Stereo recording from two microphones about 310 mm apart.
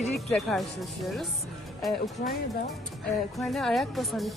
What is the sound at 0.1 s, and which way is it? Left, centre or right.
A woman's voice, centre.